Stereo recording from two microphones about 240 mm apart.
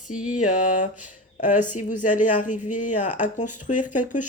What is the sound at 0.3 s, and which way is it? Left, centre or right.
Speech, left.